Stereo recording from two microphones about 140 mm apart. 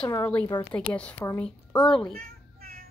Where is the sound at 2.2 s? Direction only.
90° right.